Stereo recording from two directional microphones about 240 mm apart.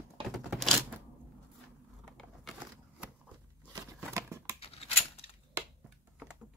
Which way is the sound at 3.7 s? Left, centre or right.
Centre.